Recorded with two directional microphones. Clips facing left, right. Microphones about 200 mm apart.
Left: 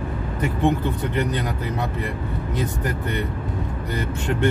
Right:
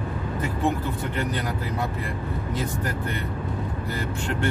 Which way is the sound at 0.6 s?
20° left (ahead or behind).